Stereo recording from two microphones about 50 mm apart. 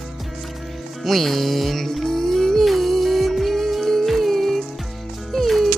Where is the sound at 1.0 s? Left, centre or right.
Centre.